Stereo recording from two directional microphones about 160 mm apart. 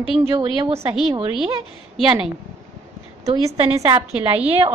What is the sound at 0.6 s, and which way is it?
Speech, 35° right (ahead or behind).